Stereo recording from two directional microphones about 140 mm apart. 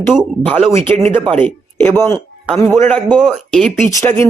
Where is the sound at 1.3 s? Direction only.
15° left (ahead or behind).